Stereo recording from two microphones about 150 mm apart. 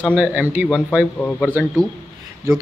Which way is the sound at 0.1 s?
10° right (ahead or behind).